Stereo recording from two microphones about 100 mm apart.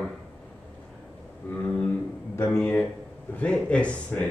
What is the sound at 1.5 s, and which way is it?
Speech, 15° left (ahead or behind).